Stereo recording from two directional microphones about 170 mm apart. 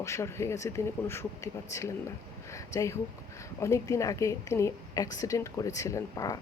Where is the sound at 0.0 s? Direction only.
15° left (ahead or behind).